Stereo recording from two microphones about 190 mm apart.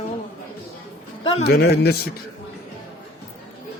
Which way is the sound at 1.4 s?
55° left (ahead or behind).